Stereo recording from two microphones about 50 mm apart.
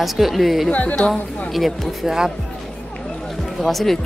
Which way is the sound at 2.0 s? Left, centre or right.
Centre.